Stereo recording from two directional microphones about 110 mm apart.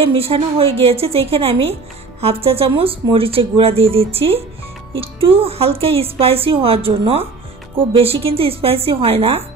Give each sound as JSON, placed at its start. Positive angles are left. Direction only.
{"t": 0.0, "sound": "a woman's voice", "side_deg": -60}